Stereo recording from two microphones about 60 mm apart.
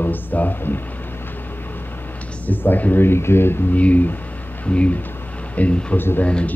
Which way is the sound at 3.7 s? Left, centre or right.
Left.